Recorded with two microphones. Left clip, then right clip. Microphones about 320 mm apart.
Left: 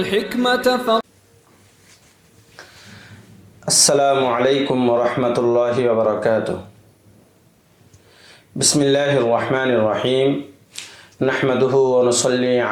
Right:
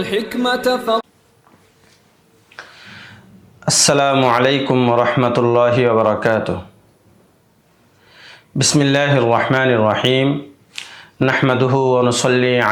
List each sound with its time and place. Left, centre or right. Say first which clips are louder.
0.0 s speech: even; centre
3.7 s speech: right 1 dB; right
8.5 s speech: right 1 dB; right